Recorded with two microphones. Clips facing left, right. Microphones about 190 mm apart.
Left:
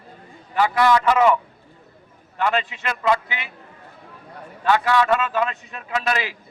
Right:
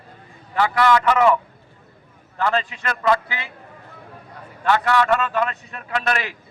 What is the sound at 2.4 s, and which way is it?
A man's voice, 20° left (ahead or behind).